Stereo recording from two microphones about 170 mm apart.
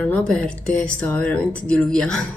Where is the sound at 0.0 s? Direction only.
5° left (ahead or behind).